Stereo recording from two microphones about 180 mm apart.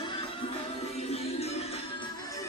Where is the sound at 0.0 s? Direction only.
30° left (ahead or behind).